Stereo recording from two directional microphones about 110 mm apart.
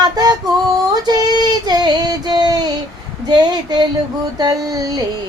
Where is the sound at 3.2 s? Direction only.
40° right (ahead or behind).